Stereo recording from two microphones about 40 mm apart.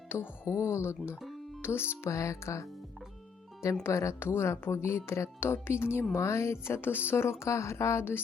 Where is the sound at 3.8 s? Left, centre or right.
Left.